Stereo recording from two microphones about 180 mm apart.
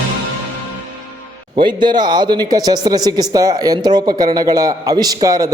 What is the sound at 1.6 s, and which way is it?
A man's voice, 25° right (ahead or behind).